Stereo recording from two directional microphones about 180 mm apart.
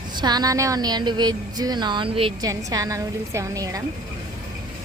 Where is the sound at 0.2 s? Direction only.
20° right (ahead or behind).